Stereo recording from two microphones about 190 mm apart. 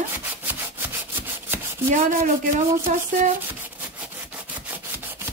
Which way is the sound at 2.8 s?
40° right (ahead or behind).